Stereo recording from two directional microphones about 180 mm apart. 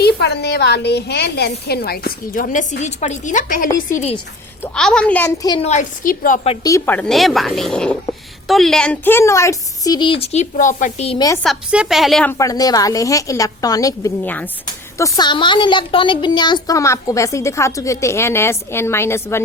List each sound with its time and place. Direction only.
0.0 s a woman's voice: 65° left (ahead or behind); by 3.7 s 45° left (ahead or behind)
3.9 s a woman's voice: 35° left (ahead or behind)
4.6 s speech: 5° left (ahead or behind)
5.4 s speech: 25° left (ahead or behind)
5.6 s a woman's voice: 45° left (ahead or behind)
6.6 s speech: 15° left (ahead or behind); by 11.2 s 35° left (ahead or behind)
11.4 s speech: 5° right (ahead or behind)
12.3 s a woman's voice: 20° left (ahead or behind)